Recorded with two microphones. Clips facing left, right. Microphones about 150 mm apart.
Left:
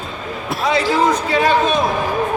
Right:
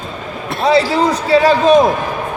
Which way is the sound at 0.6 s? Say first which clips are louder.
Right 3 dB; 35° right (ahead or behind).